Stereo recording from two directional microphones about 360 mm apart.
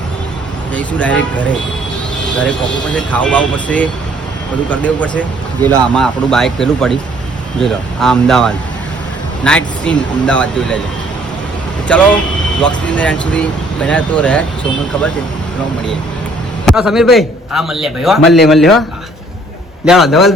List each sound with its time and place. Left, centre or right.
0.7 s speech: centre
2.4 s speech: centre
11.9 s speech: centre
16.6 s speech: centre
19.8 s speech: centre